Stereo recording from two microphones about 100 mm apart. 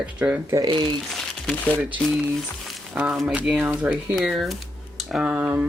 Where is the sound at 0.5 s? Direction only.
45° right (ahead or behind).